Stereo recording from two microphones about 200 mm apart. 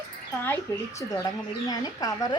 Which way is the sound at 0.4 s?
10° left (ahead or behind).